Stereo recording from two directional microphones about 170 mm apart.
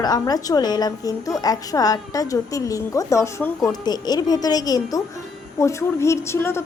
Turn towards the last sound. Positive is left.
turn(degrees=15)  # may be behind; listen again after turning